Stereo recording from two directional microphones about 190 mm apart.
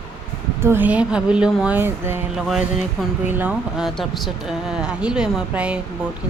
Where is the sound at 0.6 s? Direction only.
10° right (ahead or behind).